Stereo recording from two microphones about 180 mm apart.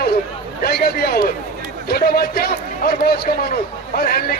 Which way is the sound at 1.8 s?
60° left (ahead or behind).